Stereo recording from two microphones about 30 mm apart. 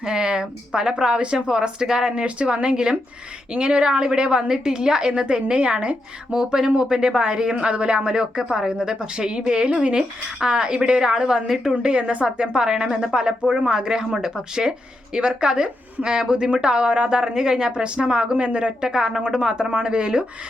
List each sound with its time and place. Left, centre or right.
0.0 s speech: right
1.2 s a woman's voice: right; by 2.1 s centre
2.1 s speech: right
3.6 s speech: right
6.4 s speech: right
11.4 s a woman's voice: centre
11.8 s speech: right
12.5 s speech: right
17.2 s speech: right